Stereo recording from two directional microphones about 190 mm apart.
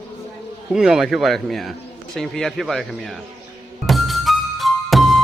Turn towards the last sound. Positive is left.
turn(degrees=0)  # may be behind; listen again after turning